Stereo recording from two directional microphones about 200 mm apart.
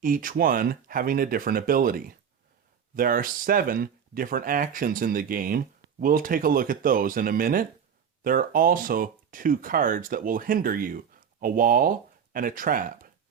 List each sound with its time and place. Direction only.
0.0 s speech: 45° right (ahead or behind)